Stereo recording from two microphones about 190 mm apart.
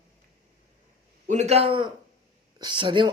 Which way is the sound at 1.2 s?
35° right (ahead or behind).